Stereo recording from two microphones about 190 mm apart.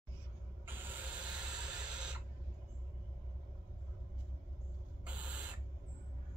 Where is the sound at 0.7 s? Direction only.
10° right (ahead or behind).